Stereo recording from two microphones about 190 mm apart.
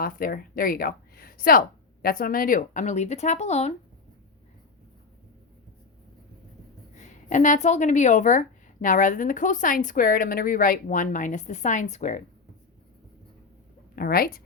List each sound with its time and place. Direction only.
0.0 s a woman's voice: 50° left (ahead or behind)
7.3 s a woman's voice: 40° left (ahead or behind)
13.9 s a woman's voice: 50° left (ahead or behind)